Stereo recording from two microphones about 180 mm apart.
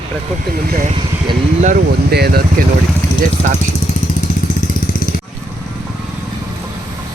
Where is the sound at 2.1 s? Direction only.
60° right (ahead or behind).